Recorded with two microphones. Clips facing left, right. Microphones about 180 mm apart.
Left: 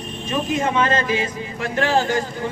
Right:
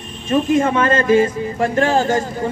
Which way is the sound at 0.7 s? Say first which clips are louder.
Right 6 dB; 50° right (ahead or behind).